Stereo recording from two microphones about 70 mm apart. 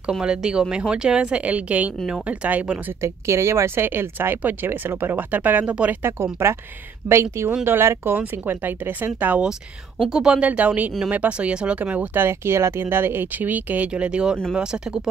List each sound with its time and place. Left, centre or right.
0.2 s speech: centre
3.0 s speech: right
7.1 s speech: right
10.0 s speech: centre